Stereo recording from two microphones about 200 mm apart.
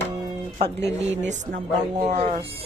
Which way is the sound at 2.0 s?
35° right (ahead or behind).